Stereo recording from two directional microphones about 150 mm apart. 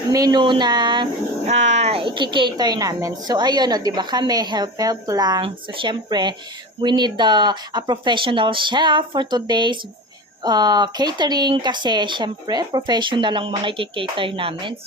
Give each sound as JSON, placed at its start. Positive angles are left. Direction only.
{"t": 0.1, "sound": "a woman's voice", "side_deg": -25}
{"t": 1.5, "sound": "a woman's voice", "side_deg": -50}